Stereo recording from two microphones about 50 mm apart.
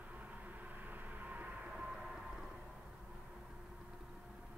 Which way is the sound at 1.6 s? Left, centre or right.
Centre.